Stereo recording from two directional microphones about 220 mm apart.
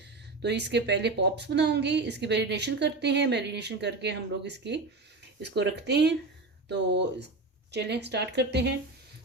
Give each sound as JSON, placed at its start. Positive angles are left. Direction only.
{"t": 0.4, "sound": "a woman's voice", "side_deg": -50}